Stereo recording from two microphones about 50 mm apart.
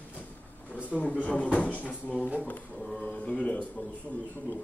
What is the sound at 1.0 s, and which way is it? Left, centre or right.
Speech, left.